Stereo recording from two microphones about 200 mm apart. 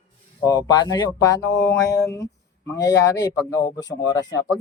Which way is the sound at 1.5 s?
15° left (ahead or behind).